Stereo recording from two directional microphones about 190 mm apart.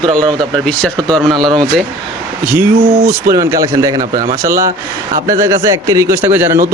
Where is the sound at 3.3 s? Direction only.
15° right (ahead or behind).